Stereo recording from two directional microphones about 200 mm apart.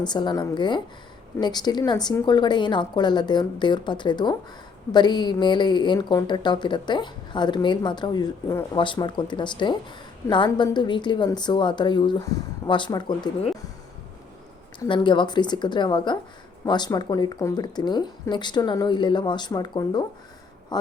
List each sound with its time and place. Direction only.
0.0 s a woman's voice: 20° left (ahead or behind)
14.8 s a woman's voice: 25° left (ahead or behind)